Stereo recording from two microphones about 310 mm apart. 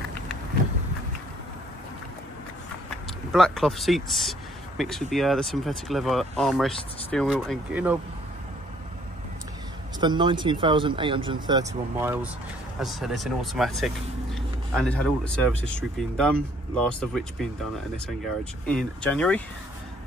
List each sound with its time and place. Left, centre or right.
3.3 s speech: centre
9.9 s speech: centre